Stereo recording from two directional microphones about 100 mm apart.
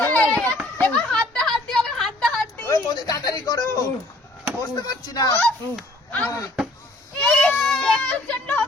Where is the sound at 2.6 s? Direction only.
35° left (ahead or behind).